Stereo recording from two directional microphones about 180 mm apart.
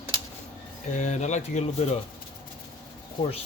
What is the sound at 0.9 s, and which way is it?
Speech, 40° left (ahead or behind).